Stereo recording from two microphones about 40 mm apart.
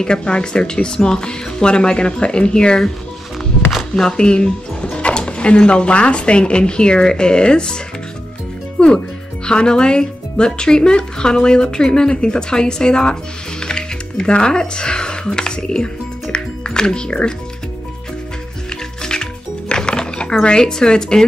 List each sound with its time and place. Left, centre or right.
0.0 s speech: left
3.9 s speech: left
8.7 s music: left
9.5 s speech: left
19.7 s music: centre
20.4 s speech: centre